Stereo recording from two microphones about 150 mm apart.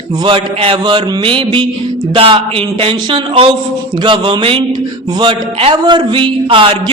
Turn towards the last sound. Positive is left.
turn(degrees=-35)  # may be behind; listen again after turning